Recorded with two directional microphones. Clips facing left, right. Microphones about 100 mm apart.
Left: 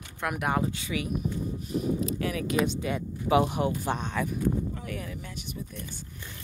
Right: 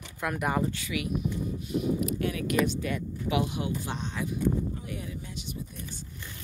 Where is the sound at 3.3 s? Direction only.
40° left (ahead or behind).